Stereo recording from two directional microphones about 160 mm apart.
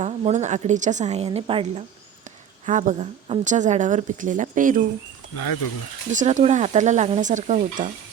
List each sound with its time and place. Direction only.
0.0 s a woman's voice: 45° right (ahead or behind)
2.6 s a woman's voice: 50° right (ahead or behind)
6.1 s a woman's voice: 50° right (ahead or behind)